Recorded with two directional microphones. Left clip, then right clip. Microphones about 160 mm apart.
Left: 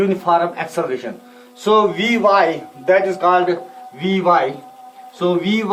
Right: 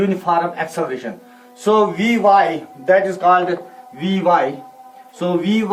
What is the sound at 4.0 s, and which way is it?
Speech, 15° left (ahead or behind).